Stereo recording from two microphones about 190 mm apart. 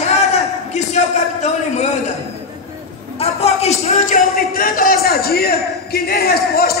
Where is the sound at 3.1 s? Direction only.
35° left (ahead or behind).